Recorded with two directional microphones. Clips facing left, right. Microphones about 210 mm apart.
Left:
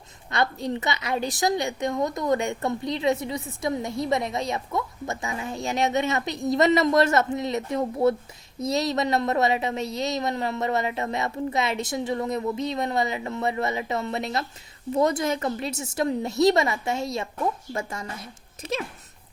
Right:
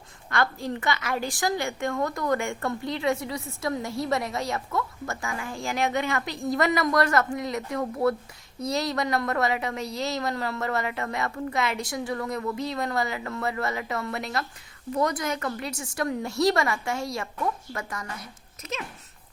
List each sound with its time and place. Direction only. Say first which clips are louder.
0.3 s a woman's voice: left 1 dB; 20° left (ahead or behind)